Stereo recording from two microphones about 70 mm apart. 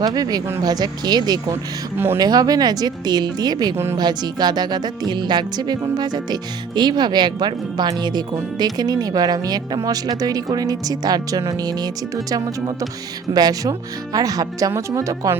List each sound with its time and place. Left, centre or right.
0.0 s speech: right
3.9 s music: right
8.5 s speech: right
14.8 s speech: right